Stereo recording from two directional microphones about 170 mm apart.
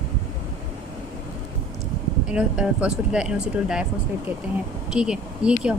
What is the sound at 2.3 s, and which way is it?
Speech, 5° right (ahead or behind).